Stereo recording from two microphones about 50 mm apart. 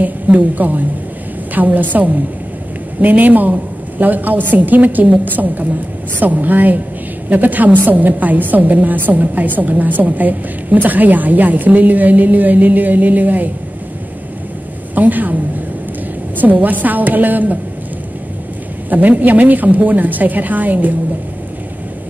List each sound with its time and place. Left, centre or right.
0.0 s a woman's voice: right
15.0 s a woman's voice: right
16.6 s a woman's voice: right
18.9 s a woman's voice: right